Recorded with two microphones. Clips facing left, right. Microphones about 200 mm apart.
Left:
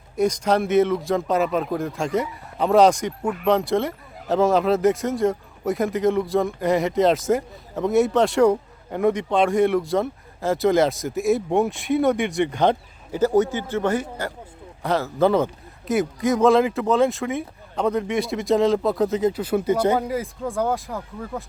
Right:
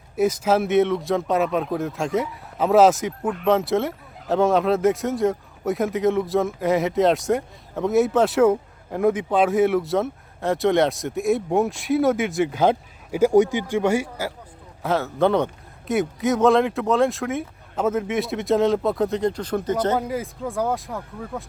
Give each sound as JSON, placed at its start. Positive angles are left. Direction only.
{"t": 0.2, "sound": "speech", "side_deg": -5}
{"t": 20.0, "sound": "speech", "side_deg": 0}